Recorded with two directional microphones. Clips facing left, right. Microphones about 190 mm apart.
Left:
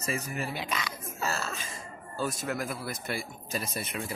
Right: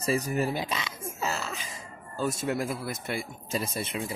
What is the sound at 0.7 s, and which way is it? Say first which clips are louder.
Speech: right 1 dB; 20° right (ahead or behind).